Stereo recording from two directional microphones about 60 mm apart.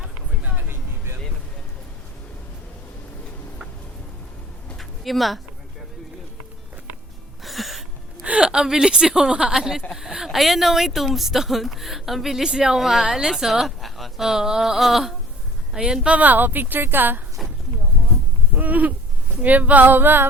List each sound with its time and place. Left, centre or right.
4.8 s a sound: centre
7.4 s a sound: centre
8.2 s a woman's voice: centre
16.0 s speech: right
18.5 s sheep: right
19.4 s female singing: right